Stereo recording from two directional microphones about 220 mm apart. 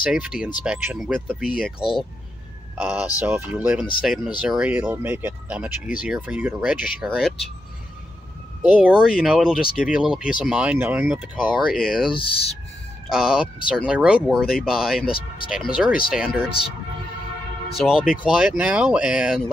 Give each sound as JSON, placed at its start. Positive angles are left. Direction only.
{"t": 0.0, "sound": "speech", "side_deg": -5}
{"t": 1.8, "sound": "speech", "side_deg": 25}
{"t": 2.8, "sound": "speech", "side_deg": -5}
{"t": 8.6, "sound": "speech", "side_deg": -5}
{"t": 12.1, "sound": "speech", "side_deg": 25}
{"t": 13.1, "sound": "speech", "side_deg": -5}
{"t": 17.7, "sound": "speech", "side_deg": -5}